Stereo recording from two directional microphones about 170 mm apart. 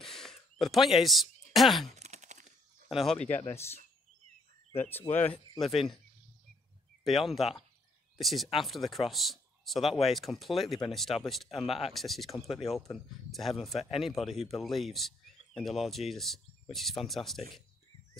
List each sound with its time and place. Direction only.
0.0 s a sound: centre (ahead or behind)
1.9 s a sound: 40° right (ahead or behind)
2.9 s speech: centre (ahead or behind)
3.4 s speech: 15° left (ahead or behind)
5.6 s speech: centre (ahead or behind)
7.1 s speech: centre (ahead or behind)